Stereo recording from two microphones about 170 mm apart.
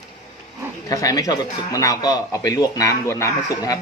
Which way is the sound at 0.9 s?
20° left (ahead or behind).